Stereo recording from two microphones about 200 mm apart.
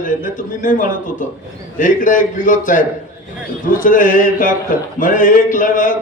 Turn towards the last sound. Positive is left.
turn(degrees=40)  # may be behind; listen again after turning